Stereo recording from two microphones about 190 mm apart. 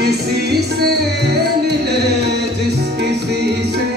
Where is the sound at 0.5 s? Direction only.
60° right (ahead or behind).